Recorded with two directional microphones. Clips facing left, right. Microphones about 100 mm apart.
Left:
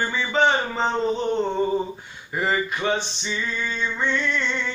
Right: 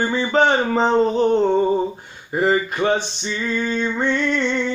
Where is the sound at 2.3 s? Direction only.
35° right (ahead or behind).